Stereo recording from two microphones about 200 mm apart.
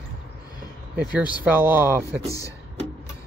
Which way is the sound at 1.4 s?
10° right (ahead or behind).